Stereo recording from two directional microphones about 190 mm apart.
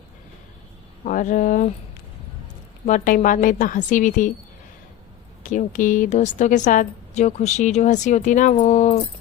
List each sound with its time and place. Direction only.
1.0 s a woman's voice: 40° left (ahead or behind)
2.8 s a woman's voice: 40° left (ahead or behind)
5.4 s a woman's voice: 40° left (ahead or behind)